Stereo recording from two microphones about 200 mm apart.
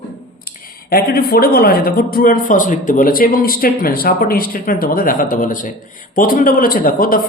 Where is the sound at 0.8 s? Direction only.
50° left (ahead or behind).